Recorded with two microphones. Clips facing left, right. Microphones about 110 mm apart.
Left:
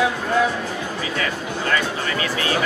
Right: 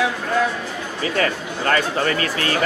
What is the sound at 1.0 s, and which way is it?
Speech, 45° right (ahead or behind).